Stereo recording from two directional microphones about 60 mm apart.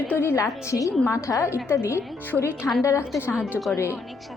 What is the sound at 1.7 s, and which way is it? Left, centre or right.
Speech, left.